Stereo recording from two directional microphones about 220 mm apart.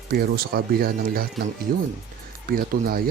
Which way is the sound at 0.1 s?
45° right (ahead or behind).